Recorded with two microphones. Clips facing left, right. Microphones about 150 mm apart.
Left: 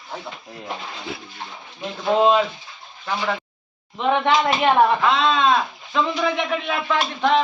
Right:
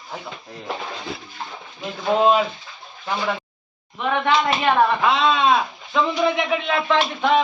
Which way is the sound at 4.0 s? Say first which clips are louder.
Left 2 dB; 20° left (ahead or behind).